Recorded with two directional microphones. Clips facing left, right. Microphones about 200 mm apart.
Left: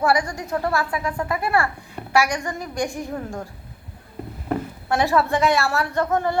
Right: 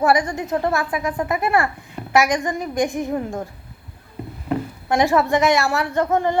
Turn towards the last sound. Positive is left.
turn(degrees=-20)  # may be behind; listen again after turning